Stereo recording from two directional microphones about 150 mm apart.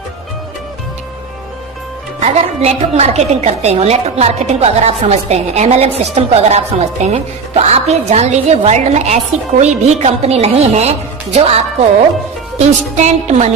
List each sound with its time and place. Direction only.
2.2 s a woman's voice: 45° right (ahead or behind)